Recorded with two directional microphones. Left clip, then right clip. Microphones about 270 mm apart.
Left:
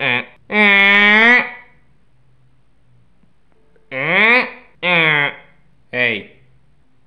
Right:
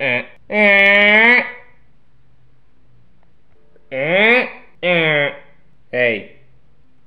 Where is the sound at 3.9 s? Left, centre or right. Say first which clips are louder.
Even; left.